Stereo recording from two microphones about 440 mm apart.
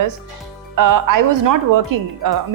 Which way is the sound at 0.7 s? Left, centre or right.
Right.